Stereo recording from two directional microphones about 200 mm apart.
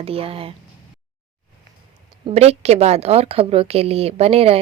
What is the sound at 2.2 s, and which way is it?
A woman's voice, 30° right (ahead or behind).